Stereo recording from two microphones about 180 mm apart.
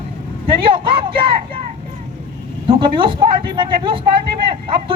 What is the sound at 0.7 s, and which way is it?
Speech, 30° right (ahead or behind).